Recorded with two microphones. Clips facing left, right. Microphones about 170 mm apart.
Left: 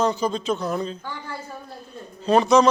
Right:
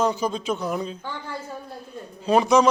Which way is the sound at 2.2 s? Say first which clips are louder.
Left 1 dB; 10° right (ahead or behind).